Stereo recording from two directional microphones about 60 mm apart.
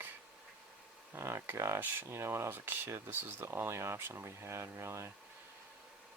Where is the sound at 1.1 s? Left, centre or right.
Right.